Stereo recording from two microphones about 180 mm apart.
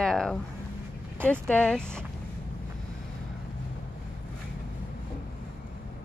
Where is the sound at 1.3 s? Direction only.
5° left (ahead or behind).